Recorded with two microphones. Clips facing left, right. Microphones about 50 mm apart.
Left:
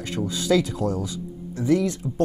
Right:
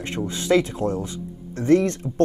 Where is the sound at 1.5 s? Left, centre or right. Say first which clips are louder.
Right 3 dB; right.